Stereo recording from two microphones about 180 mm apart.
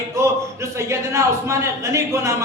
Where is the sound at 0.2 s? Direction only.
15° right (ahead or behind).